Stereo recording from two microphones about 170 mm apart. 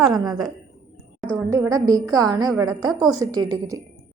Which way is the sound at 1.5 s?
20° right (ahead or behind).